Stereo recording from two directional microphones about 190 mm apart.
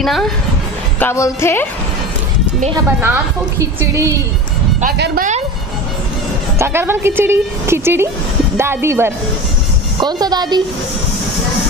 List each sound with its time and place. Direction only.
0.0 s speech: centre (ahead or behind)
0.9 s a woman's voice: 15° left (ahead or behind)
2.7 s speech: 15° right (ahead or behind)
4.9 s speech: 60° right (ahead or behind)
6.6 s a woman's voice: 10° right (ahead or behind)